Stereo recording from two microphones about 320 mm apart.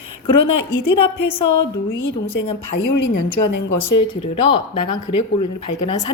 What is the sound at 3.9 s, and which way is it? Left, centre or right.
Speech, centre.